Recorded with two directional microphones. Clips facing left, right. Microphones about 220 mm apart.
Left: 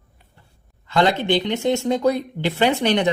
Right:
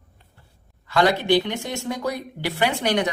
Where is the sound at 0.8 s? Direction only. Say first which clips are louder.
Left 1 dB; 25° left (ahead or behind).